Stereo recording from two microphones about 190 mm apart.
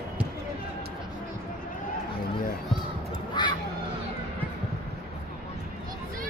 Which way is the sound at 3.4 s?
25° left (ahead or behind).